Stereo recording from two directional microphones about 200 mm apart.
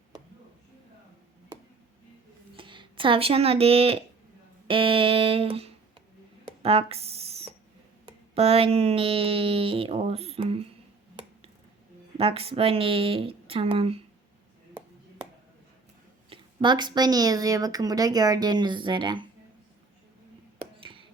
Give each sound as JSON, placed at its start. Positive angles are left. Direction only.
{"t": 2.6, "sound": "speech", "side_deg": -25}
{"t": 6.6, "sound": "a sound", "side_deg": -30}
{"t": 8.0, "sound": "speech", "side_deg": -30}
{"t": 12.1, "sound": "speech", "side_deg": -30}
{"t": 16.3, "sound": "speech", "side_deg": -25}
{"t": 20.7, "sound": "a sound", "side_deg": -25}